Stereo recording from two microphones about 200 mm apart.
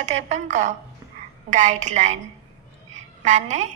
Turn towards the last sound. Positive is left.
turn(degrees=-35)  # may be behind; listen again after turning